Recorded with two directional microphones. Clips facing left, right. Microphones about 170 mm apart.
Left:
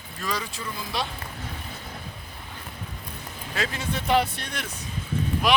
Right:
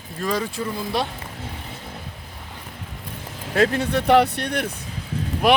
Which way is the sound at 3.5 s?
55° right (ahead or behind).